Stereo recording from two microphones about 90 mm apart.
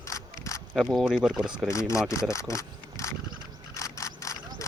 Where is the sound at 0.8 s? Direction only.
5° right (ahead or behind).